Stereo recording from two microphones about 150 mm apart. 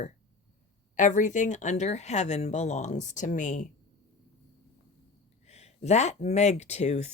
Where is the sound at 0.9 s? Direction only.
55° left (ahead or behind).